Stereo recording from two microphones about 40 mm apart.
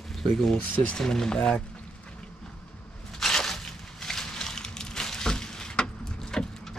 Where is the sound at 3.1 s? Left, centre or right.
Centre.